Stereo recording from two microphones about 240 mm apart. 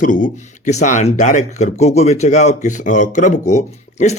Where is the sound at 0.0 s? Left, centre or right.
Left.